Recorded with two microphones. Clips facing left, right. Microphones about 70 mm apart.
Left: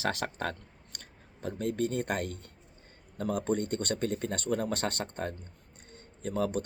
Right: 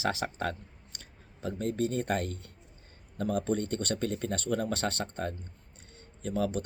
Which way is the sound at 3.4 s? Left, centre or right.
Left.